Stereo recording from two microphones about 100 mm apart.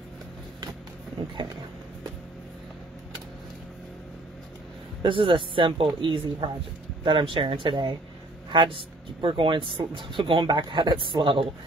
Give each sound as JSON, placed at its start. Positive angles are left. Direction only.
{"t": 5.0, "sound": "speech", "side_deg": -60}